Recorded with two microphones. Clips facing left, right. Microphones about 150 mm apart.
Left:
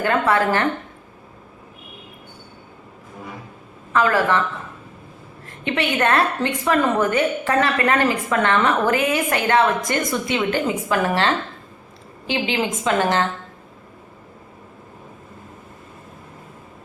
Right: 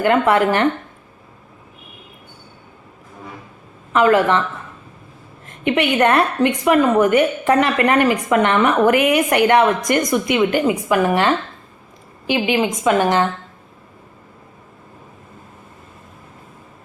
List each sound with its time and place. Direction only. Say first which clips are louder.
0.0 s speech: right 4 dB; 20° right (ahead or behind)
3.9 s speech: right 4 dB; 20° right (ahead or behind)
5.5 s a woman's voice: right 5 dB; 20° right (ahead or behind)
12.3 s a woman's voice: right 4 dB; 15° right (ahead or behind)